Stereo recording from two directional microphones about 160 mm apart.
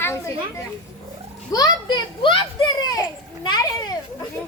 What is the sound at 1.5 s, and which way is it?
A child's voice, 25° left (ahead or behind).